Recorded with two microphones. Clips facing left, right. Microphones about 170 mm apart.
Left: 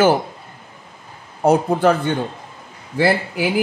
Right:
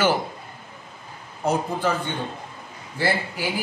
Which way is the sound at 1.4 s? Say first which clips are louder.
Left 8 dB; 65° left (ahead or behind).